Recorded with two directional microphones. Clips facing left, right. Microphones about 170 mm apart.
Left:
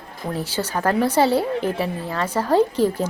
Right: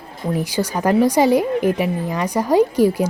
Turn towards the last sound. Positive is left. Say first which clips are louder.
# right 3 dB
turn(degrees=-10)  # may be behind; listen again after turning